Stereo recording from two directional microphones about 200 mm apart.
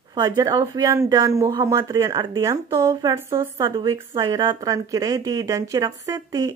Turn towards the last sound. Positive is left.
turn(degrees=-20)  # may be behind; listen again after turning